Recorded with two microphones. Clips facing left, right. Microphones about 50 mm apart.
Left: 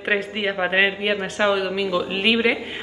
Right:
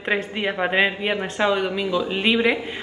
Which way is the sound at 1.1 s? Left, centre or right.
Centre.